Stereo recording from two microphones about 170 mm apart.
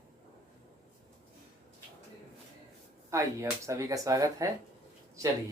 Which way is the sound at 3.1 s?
20° right (ahead or behind).